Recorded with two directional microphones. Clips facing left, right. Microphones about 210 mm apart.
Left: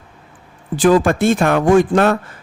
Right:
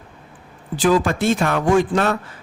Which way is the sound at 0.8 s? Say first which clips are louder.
Left 5 dB; 50° left (ahead or behind).